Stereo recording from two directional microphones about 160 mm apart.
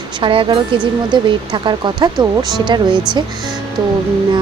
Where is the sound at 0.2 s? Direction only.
30° right (ahead or behind).